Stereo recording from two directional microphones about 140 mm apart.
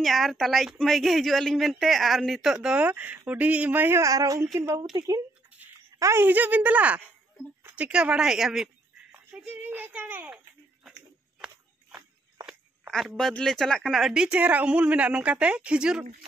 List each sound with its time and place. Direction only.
0.0 s a woman's voice: centre (ahead or behind)
9.1 s a sound: 10° right (ahead or behind)
13.3 s speech: 5° left (ahead or behind)